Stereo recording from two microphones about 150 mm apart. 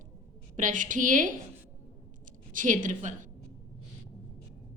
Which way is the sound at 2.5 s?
60° right (ahead or behind).